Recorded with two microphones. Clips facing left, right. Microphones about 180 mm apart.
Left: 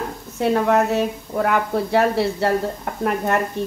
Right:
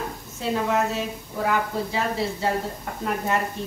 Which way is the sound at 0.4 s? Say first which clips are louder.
Left 6 dB; 60° left (ahead or behind).